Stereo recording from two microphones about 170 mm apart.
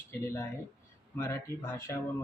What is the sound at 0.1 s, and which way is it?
Speech, 15° left (ahead or behind).